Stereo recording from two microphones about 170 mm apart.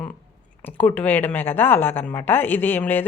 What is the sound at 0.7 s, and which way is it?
A woman's voice, 10° left (ahead or behind).